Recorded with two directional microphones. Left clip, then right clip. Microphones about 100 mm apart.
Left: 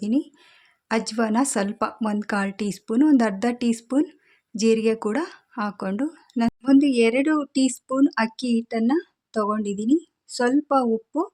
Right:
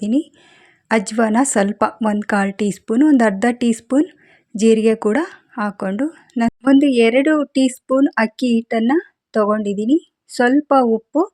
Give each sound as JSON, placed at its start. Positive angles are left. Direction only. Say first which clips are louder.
{"t": 0.0, "sound": "speech", "louder": "right 5 dB", "side_deg": -50}